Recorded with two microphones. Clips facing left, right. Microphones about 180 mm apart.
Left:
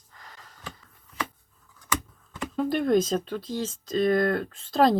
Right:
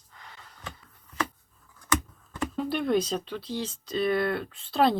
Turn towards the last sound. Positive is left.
turn(degrees=40)  # may be behind; listen again after turning